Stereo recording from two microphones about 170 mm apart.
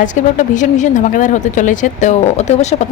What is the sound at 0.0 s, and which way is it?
Speech, 45° left (ahead or behind).